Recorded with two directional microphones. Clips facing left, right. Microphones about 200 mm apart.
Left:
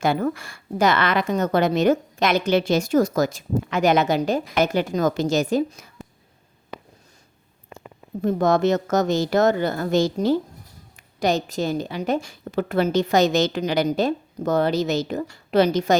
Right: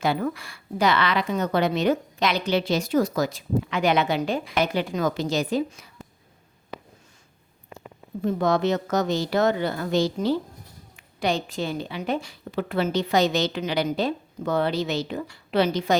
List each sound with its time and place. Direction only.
0.0 s a woman's voice: 45° left (ahead or behind)
8.2 s a woman's voice: 45° left (ahead or behind)